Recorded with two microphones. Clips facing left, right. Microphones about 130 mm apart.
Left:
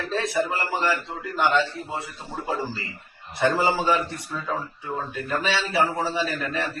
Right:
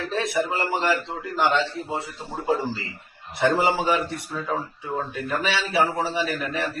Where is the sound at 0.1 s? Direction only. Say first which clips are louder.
Even; 15° right (ahead or behind).